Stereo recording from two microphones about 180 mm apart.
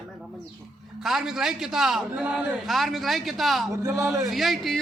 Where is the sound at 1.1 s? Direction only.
Centre (ahead or behind).